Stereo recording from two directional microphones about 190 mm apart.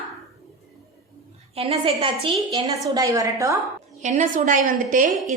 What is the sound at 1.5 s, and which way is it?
Speech, 30° right (ahead or behind).